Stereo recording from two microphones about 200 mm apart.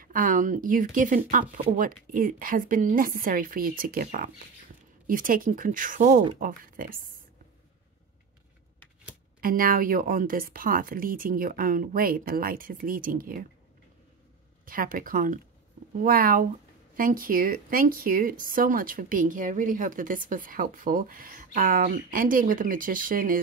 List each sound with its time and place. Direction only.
0.0 s speech: 45° right (ahead or behind)
9.4 s speech: 45° right (ahead or behind)
14.7 s speech: 45° right (ahead or behind)